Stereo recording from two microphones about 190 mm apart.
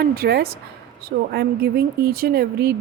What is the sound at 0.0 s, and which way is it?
Speech, 55° right (ahead or behind).